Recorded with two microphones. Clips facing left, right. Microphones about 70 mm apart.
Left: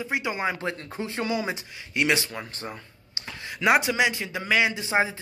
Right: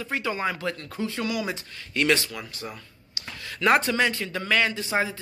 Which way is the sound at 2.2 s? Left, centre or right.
Left.